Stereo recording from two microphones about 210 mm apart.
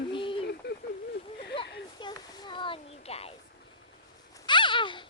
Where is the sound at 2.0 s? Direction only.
20° left (ahead or behind).